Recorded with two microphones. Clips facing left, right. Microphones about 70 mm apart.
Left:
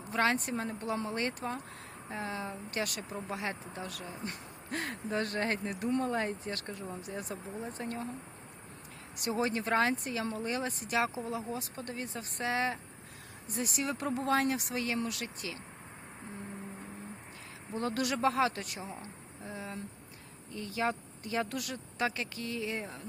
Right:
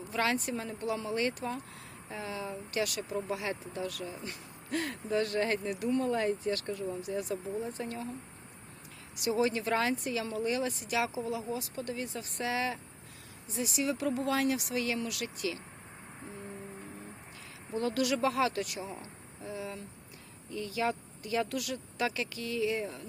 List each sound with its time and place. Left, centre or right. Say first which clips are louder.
0.1 s speech: left 1 dB; left
9.1 s speech: right 3 dB; left
13.5 s speech: right 2 dB; left
17.7 s speech: right 3 dB; left